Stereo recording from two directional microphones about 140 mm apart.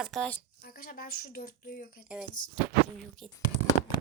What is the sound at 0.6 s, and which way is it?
A woman's voice, 90° left.